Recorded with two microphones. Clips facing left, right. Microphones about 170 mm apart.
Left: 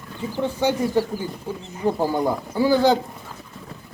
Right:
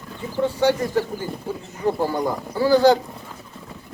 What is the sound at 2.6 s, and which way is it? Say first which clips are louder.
Speech: right 2 dB; 15° left (ahead or behind).